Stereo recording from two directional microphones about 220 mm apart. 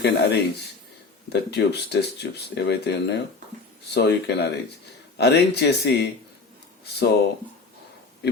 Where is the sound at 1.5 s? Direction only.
50° left (ahead or behind).